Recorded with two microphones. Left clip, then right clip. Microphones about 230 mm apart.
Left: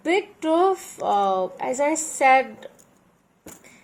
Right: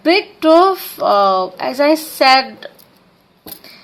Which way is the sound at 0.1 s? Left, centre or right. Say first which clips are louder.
Right 11 dB; right.